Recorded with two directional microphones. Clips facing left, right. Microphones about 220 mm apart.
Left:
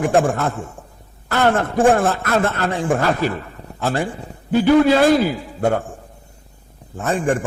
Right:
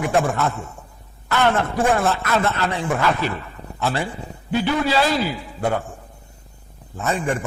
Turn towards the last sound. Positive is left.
turn(degrees=50)  # may be behind; listen again after turning